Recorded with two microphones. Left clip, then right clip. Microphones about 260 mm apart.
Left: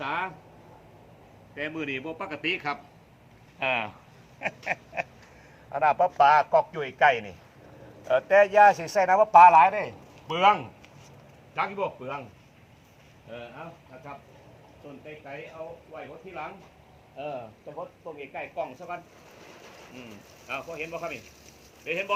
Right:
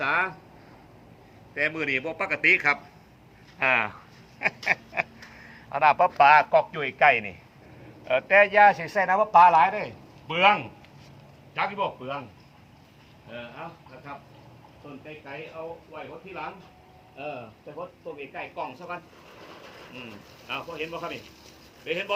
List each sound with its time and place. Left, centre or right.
0.0 s a sound: right
1.5 s a man's voice: right
4.4 s a sound: right
5.7 s a man's voice: centre
8.0 s a man's voice: left
18.2 s speech: centre
20.5 s speech: centre